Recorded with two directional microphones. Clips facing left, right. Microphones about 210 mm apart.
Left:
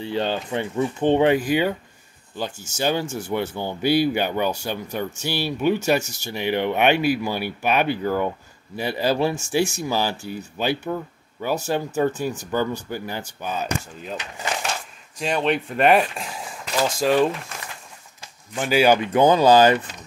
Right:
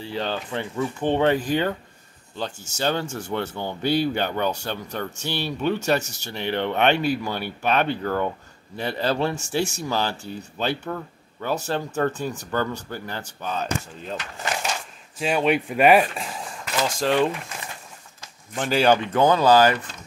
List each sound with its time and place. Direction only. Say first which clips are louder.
0.0 s speech: left 4 dB; 20° left (ahead or behind)
14.7 s speech: even; 5° right (ahead or behind)
18.5 s speech: left 2 dB; 5° left (ahead or behind)
19.1 s speech: left 3 dB; 15° left (ahead or behind)